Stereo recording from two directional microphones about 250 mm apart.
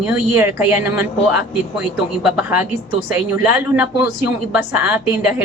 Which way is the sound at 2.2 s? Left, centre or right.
Centre.